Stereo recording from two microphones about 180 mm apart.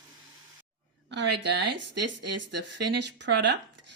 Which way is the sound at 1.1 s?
70° right (ahead or behind).